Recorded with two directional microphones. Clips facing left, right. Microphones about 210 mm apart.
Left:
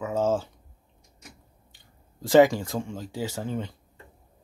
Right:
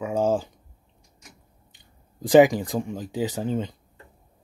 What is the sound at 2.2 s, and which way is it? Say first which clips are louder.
Speech: right 2 dB; 15° right (ahead or behind).